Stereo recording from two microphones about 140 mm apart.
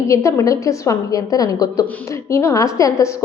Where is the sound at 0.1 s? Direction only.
20° left (ahead or behind).